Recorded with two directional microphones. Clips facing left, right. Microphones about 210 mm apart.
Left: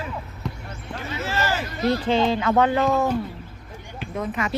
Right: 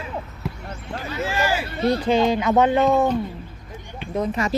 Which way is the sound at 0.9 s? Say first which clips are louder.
Right 3 dB; 35° right (ahead or behind).